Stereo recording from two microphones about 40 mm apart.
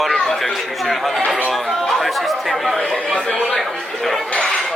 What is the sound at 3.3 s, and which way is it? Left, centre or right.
Speech, centre.